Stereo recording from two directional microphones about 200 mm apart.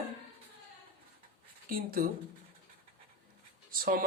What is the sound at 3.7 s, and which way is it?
Speech, 45° right (ahead or behind).